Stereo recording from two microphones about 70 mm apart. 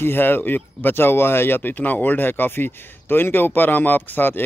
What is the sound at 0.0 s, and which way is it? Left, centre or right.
Speech, left.